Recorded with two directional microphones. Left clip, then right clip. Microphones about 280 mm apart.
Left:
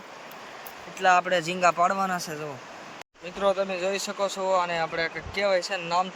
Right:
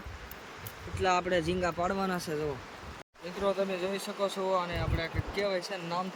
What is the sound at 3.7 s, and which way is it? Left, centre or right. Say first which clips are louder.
Speech: left 6 dB; centre.